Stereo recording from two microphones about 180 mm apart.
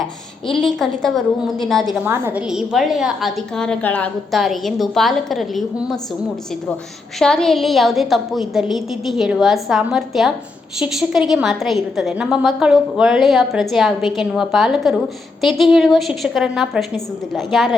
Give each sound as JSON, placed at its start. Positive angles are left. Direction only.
{"t": 0.0, "sound": "a woman's voice", "side_deg": 0}
{"t": 2.0, "sound": "a woman's voice", "side_deg": -10}
{"t": 7.2, "sound": "a woman's voice", "side_deg": 5}